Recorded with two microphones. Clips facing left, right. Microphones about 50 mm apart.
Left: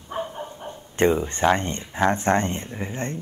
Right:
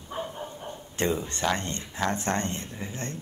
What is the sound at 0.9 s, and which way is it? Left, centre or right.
Speech, left.